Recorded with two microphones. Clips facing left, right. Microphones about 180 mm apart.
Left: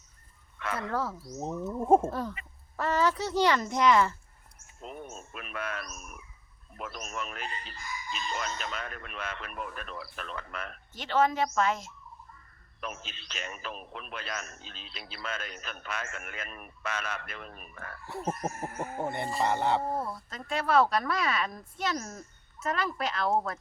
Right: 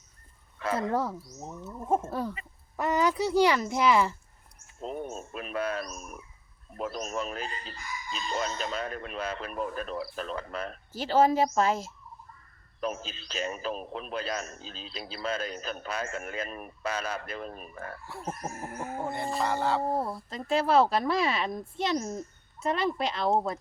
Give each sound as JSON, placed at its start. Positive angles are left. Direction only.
{"t": 0.6, "sound": "speech", "side_deg": -30}
{"t": 1.4, "sound": "gargling", "side_deg": 30}
{"t": 2.0, "sound": "speech", "side_deg": -10}
{"t": 4.8, "sound": "a man's voice", "side_deg": -35}
{"t": 18.1, "sound": "gargling", "side_deg": 20}
{"t": 20.0, "sound": "speech", "side_deg": -25}